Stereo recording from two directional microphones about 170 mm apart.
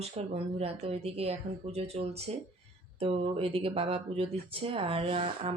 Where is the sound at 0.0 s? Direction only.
35° right (ahead or behind).